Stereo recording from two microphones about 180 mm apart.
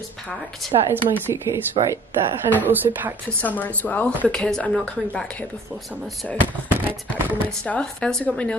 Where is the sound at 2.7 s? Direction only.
10° right (ahead or behind).